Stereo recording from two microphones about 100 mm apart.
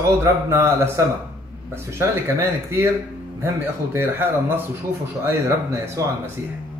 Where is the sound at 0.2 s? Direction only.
25° right (ahead or behind).